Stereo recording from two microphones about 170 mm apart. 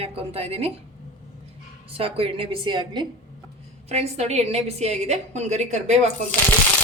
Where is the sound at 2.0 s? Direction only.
35° right (ahead or behind).